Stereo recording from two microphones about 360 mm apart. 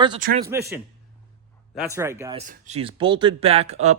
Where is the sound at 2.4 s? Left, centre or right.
Centre.